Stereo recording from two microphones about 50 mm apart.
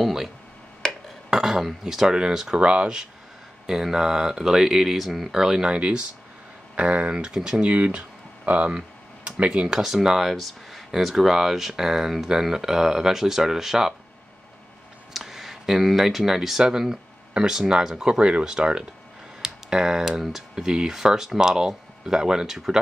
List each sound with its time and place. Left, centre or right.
1.3 s speech: centre
7.7 s speech: right
8.7 s tick-tock: right
9.8 s speech: centre
15.1 s speech: centre